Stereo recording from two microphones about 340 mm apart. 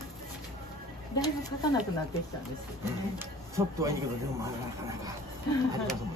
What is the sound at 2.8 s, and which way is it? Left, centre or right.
Speech, centre.